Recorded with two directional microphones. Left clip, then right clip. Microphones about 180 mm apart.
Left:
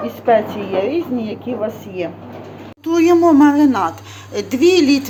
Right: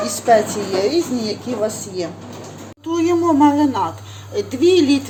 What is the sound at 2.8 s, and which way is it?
Speech, 15° left (ahead or behind).